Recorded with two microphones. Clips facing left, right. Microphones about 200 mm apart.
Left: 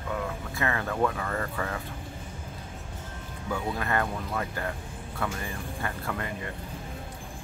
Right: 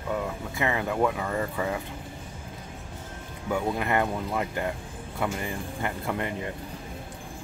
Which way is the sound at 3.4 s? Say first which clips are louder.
Right 4 dB; 15° right (ahead or behind).